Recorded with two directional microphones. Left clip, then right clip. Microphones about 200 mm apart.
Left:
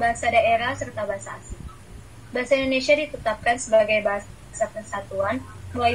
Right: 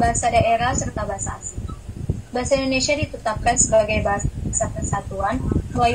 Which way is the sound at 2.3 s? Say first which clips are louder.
Right 1 dB; 40° right (ahead or behind).